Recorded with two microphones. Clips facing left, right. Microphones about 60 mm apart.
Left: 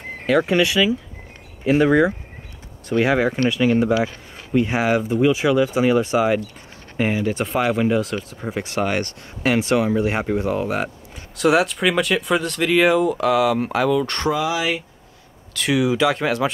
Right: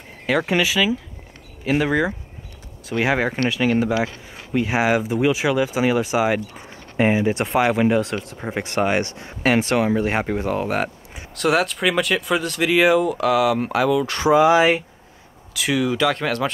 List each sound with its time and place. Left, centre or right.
0.3 s speech: centre
7.0 s speech: centre
7.3 s speech: centre
14.3 s speech: right
15.5 s speech: centre